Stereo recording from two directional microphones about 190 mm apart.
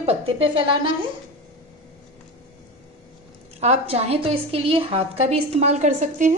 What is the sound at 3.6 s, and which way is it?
A woman's voice, 35° right (ahead or behind).